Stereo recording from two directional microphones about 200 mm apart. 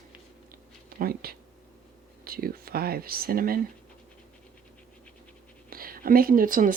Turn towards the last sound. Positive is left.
turn(degrees=-45)  # may be behind; listen again after turning